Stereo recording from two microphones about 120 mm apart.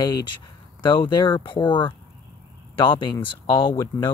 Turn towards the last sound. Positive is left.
turn(degrees=40)  # may be behind; listen again after turning